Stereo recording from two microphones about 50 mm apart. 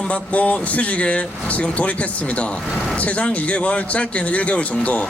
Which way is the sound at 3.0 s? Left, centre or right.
Left.